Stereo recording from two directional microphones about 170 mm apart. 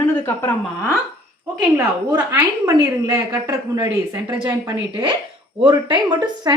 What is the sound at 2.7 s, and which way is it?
A woman's voice, 20° right (ahead or behind).